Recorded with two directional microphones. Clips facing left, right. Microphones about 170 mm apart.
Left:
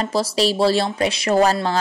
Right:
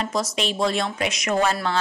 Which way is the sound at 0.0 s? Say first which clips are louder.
Left 5 dB; 35° left (ahead or behind).